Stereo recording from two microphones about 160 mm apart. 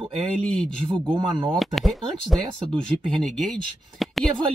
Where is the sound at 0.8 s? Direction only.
35° right (ahead or behind).